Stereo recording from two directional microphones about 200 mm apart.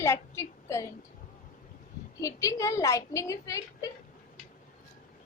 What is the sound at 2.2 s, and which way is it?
A woman's voice, 15° left (ahead or behind).